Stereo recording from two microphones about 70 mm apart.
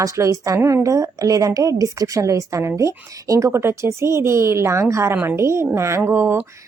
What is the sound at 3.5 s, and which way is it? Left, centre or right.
Speech, right.